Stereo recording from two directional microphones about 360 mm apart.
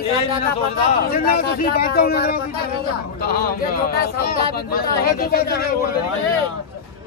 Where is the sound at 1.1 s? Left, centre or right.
Left.